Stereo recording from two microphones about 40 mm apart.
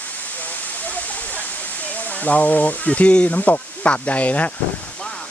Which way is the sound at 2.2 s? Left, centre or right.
Left.